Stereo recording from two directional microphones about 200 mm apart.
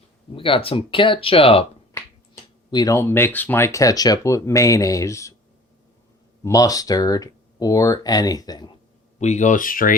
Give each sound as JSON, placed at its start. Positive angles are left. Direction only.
{"t": 0.3, "sound": "speech", "side_deg": 25}
{"t": 1.9, "sound": "speech", "side_deg": 15}
{"t": 6.4, "sound": "speech", "side_deg": 15}
{"t": 9.2, "sound": "speech", "side_deg": 35}